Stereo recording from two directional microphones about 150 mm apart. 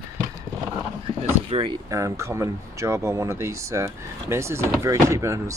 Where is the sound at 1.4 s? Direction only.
40° right (ahead or behind).